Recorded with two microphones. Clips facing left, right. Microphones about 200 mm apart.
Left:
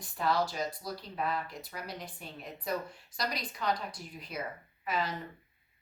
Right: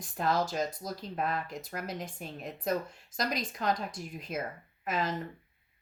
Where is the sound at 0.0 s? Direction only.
45° right (ahead or behind).